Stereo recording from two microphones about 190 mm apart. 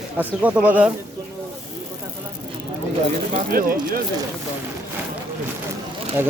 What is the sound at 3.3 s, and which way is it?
Speech, 50° right (ahead or behind).